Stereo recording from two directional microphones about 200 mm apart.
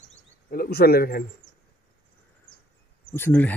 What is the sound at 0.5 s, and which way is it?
Speech, 50° left (ahead or behind).